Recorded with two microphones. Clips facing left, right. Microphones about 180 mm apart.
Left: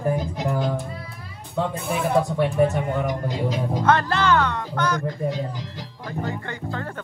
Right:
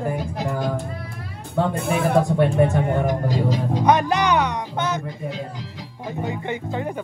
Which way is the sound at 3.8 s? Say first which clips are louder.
Right 2 dB; 15° right (ahead or behind).